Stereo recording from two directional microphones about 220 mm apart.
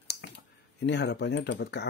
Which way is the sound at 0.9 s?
50° left (ahead or behind).